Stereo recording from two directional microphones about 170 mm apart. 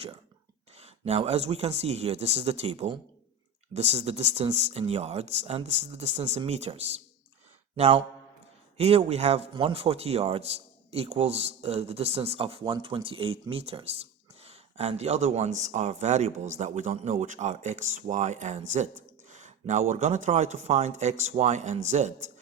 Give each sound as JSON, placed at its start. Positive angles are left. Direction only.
{"t": 0.8, "sound": "a man's voice", "side_deg": -35}